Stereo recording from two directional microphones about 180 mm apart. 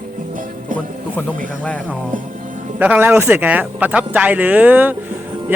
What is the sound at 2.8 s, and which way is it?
Speech, 10° right (ahead or behind).